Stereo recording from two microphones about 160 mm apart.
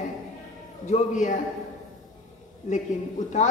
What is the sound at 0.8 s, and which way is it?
Speech, 50° left (ahead or behind).